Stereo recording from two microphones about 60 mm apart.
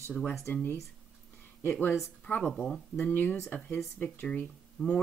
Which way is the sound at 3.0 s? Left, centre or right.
Left.